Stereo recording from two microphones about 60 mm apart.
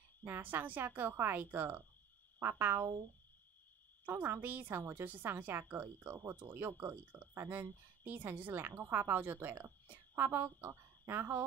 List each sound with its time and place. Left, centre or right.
0.2 s a woman's voice: right
4.1 s a woman's voice: right